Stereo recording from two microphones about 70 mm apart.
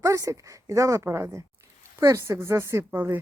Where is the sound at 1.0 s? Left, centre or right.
Right.